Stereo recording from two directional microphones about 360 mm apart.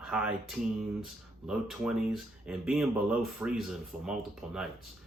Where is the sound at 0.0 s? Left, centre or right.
Centre.